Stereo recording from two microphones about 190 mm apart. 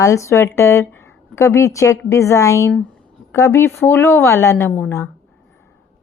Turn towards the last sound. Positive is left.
turn(degrees=10)  # may be behind; listen again after turning